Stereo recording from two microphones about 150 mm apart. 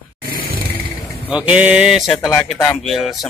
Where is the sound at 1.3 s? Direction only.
10° right (ahead or behind).